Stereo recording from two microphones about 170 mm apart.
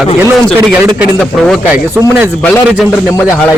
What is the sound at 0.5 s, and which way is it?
Speech, 15° right (ahead or behind).